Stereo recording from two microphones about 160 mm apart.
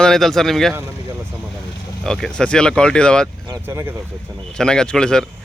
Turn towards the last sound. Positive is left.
turn(degrees=5)  # may be behind; listen again after turning